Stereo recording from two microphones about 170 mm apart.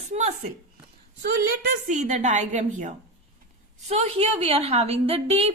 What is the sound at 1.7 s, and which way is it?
A woman's voice, 45° right (ahead or behind).